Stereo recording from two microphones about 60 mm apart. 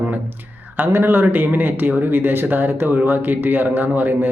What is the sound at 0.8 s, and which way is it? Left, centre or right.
Speech, right.